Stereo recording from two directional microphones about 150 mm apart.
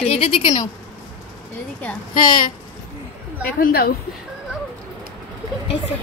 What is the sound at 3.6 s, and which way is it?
Speech, 90° left.